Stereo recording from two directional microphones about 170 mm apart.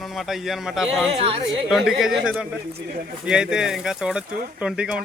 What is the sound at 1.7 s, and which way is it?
Speech, centre (ahead or behind).